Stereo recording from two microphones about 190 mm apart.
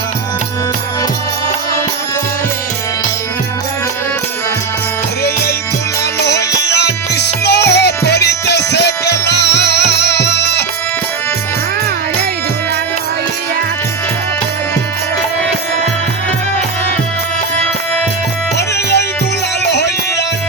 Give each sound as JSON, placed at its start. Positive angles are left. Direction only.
{"t": 5.2, "sound": "music", "side_deg": 55}
{"t": 18.5, "sound": "music", "side_deg": 60}